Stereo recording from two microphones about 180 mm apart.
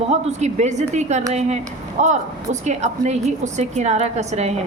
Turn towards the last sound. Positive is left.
turn(degrees=-40)  # may be behind; listen again after turning